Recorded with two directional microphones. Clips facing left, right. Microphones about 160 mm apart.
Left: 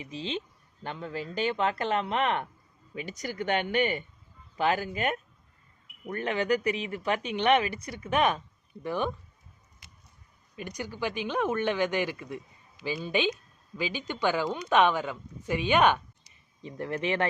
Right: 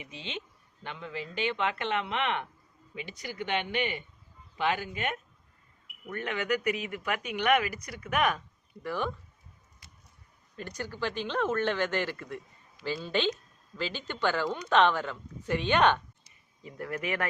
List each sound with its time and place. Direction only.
0.0 s speech: 35° left (ahead or behind)
10.5 s speech: 15° left (ahead or behind)
16.6 s speech: 25° left (ahead or behind)